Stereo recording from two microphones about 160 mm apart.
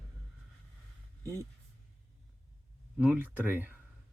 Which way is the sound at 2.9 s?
10° right (ahead or behind).